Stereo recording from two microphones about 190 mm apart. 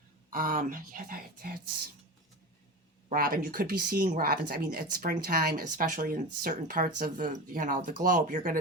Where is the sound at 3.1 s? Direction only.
50° right (ahead or behind).